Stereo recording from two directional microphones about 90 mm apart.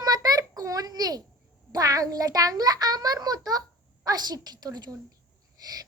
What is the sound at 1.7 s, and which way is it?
A woman's voice, 40° right (ahead or behind).